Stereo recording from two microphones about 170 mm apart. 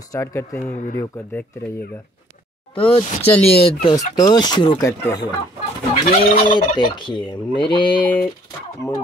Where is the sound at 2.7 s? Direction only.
35° left (ahead or behind).